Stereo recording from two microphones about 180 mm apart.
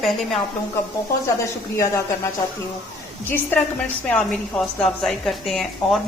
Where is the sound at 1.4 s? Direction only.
15° left (ahead or behind).